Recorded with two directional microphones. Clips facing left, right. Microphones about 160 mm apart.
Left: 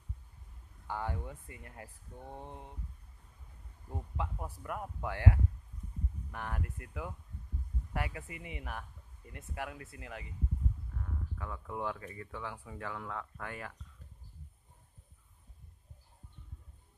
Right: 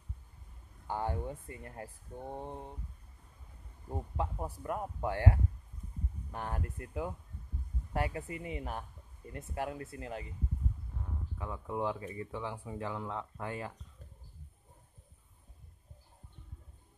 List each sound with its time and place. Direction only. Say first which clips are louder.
0.8 s speech: right 3 dB; 30° right (ahead or behind)
3.9 s speech: right 3 dB; 30° right (ahead or behind)
11.0 s speech: even; 20° right (ahead or behind)